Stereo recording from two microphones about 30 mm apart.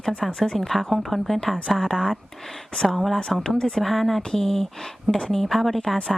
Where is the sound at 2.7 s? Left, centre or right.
Centre.